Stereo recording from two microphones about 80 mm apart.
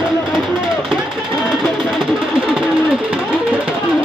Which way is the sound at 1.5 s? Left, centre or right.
Centre.